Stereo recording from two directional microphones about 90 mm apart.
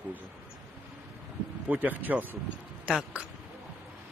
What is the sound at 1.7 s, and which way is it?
Speech, 20° right (ahead or behind).